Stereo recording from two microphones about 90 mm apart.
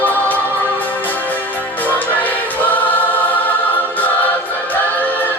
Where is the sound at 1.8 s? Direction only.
20° left (ahead or behind).